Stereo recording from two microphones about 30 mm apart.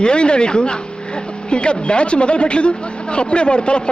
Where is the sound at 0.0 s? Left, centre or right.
Left.